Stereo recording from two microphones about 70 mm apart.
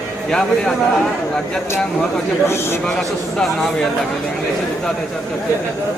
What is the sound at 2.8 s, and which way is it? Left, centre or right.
Speech, centre.